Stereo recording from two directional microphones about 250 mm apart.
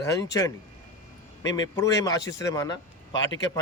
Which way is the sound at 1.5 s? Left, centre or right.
Centre.